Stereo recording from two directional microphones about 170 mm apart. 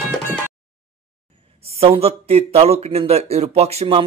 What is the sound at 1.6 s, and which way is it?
A man's voice, 35° right (ahead or behind).